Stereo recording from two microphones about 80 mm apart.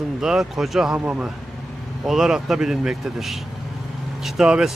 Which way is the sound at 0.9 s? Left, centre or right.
Centre.